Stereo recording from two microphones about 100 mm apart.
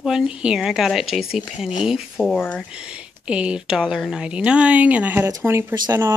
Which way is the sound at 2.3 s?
20° left (ahead or behind).